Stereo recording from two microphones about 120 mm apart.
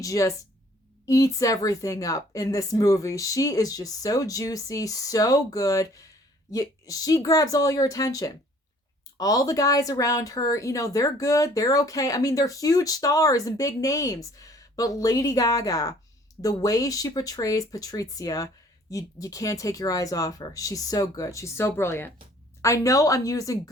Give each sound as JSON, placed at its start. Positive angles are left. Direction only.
{"t": 0.0, "sound": "speech", "side_deg": 25}